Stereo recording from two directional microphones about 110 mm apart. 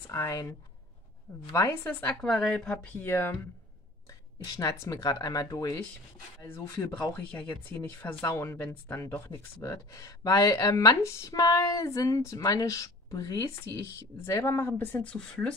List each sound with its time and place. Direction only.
0.0 s speech: 25° left (ahead or behind)
2.2 s speech: 5° left (ahead or behind); by 3.3 s 20° left (ahead or behind)
4.1 s speech: 30° left (ahead or behind)
15.0 s speech: 5° left (ahead or behind)